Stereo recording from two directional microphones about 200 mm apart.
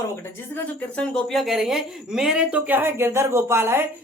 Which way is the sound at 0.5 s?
5° left (ahead or behind).